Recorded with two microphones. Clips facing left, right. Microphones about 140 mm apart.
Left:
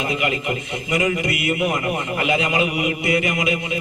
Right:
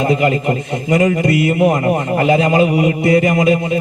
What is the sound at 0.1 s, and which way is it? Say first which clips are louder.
A man's voice: right 8 dB; 40° right (ahead or behind).